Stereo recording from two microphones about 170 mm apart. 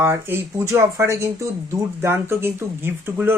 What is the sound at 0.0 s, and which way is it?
Speech, 15° right (ahead or behind).